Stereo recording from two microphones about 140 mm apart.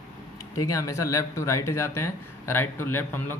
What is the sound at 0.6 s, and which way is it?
Speech, 20° left (ahead or behind).